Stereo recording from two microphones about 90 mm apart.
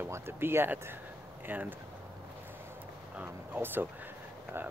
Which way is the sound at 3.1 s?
20° right (ahead or behind).